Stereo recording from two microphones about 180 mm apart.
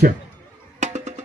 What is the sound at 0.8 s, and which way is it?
Music, 40° right (ahead or behind).